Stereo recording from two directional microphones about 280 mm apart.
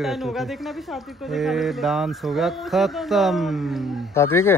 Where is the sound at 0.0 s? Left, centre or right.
Centre.